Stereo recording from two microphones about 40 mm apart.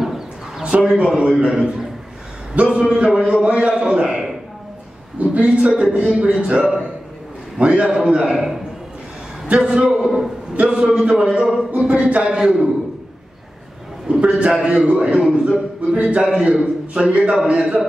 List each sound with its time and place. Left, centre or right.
0.0 s bird: centre
0.9 s a man's voice: right
2.5 s a man's voice: right
2.8 s a man's voice: right
4.1 s a sound: centre
5.2 s a man's voice: right
9.8 s a man's voice: centre
10.0 s a man's voice: centre
10.5 s a man's voice: right
12.1 s a man's voice: right
12.4 s a man's voice: centre
14.1 s a man's voice: right